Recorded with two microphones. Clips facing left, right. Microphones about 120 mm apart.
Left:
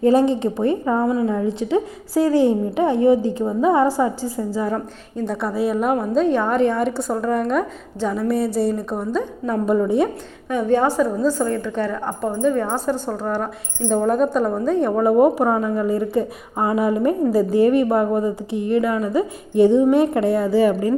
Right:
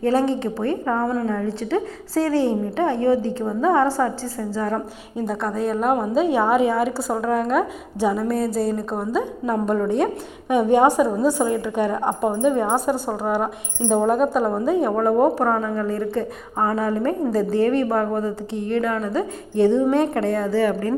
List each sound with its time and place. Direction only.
0.0 s a woman's voice: 15° left (ahead or behind)
5.1 s a woman's voice: centre (ahead or behind)
10.5 s a woman's voice: 15° right (ahead or behind); by 20.9 s 15° left (ahead or behind)